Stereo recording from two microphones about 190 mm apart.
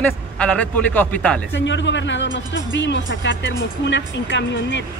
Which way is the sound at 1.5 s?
70° left (ahead or behind).